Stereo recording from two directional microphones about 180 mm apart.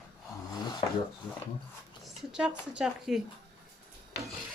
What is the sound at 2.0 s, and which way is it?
Speech, 5° right (ahead or behind).